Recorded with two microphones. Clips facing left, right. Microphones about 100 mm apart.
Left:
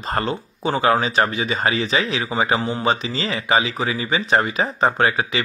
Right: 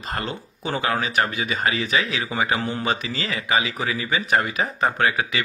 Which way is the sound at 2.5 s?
20° left (ahead or behind).